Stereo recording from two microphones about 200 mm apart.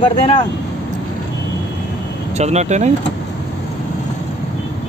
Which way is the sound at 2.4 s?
35° right (ahead or behind).